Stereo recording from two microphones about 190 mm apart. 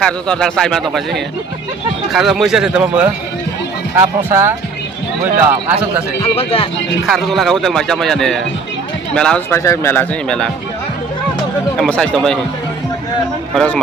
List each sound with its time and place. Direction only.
0.0 s speech: 5° left (ahead or behind); by 4.5 s 15° right (ahead or behind)
6.3 s speech: 30° left (ahead or behind)
7.1 s speech: centre (ahead or behind)
11.8 s speech: 5° left (ahead or behind)
13.5 s speech: centre (ahead or behind)